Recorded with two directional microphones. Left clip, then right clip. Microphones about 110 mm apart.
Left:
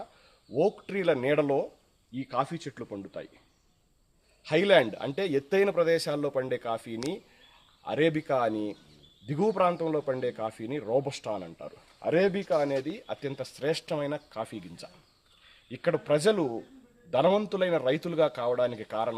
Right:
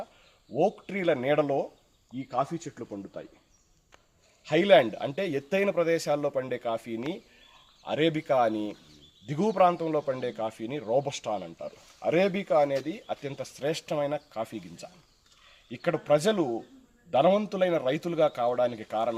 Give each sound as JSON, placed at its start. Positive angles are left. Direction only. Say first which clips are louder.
{"t": 0.5, "sound": "speech", "louder": "even", "side_deg": 30}
{"t": 4.4, "sound": "a man's voice", "louder": "right 2 dB", "side_deg": 30}